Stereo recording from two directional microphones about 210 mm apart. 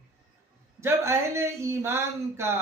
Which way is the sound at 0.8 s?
10° right (ahead or behind).